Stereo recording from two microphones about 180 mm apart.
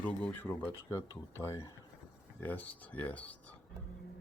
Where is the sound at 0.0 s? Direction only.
10° left (ahead or behind).